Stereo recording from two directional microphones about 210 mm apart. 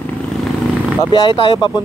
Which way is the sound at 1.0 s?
20° left (ahead or behind).